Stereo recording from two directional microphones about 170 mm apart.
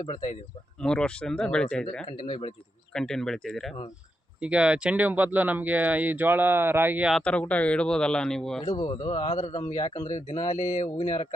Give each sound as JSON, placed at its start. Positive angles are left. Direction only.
{"t": 0.8, "sound": "speech", "side_deg": 5}
{"t": 7.2, "sound": "speech", "side_deg": 5}
{"t": 8.6, "sound": "speech", "side_deg": 25}
{"t": 10.1, "sound": "speech", "side_deg": 45}